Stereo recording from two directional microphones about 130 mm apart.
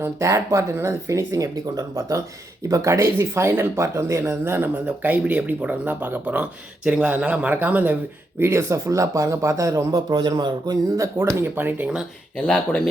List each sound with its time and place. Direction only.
0.0 s speech: 20° right (ahead or behind)
12.5 s speech: 5° left (ahead or behind)